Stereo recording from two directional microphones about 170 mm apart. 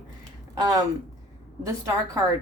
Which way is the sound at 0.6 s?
20° right (ahead or behind).